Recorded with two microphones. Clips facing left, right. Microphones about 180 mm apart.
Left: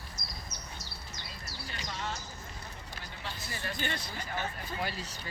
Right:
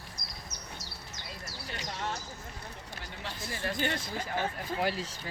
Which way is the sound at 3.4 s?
50° right (ahead or behind).